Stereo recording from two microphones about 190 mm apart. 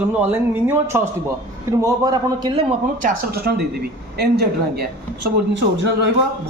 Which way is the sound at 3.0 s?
50° right (ahead or behind).